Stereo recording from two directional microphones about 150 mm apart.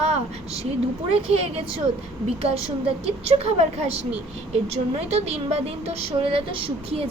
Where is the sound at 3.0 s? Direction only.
45° right (ahead or behind).